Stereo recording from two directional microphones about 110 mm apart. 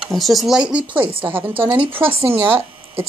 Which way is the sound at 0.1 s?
Centre (ahead or behind).